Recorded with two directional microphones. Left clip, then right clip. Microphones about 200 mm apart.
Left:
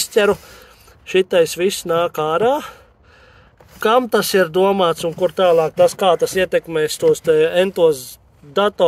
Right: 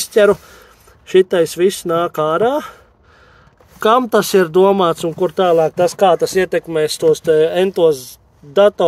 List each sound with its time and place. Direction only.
0.0 s speech: 30° right (ahead or behind)
3.8 s speech: 35° right (ahead or behind); by 8.8 s 20° right (ahead or behind)